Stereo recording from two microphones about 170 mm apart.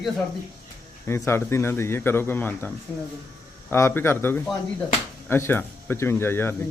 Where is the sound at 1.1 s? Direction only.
15° left (ahead or behind).